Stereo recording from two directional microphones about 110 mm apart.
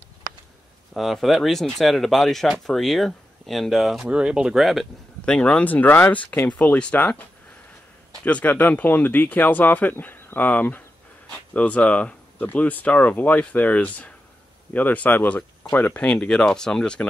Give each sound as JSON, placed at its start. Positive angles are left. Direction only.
{"t": 0.9, "sound": "speech", "side_deg": 0}